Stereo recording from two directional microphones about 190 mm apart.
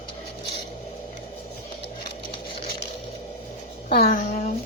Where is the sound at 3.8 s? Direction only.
40° left (ahead or behind).